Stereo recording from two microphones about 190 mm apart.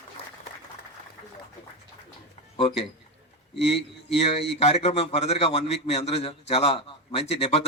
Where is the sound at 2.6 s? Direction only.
30° left (ahead or behind).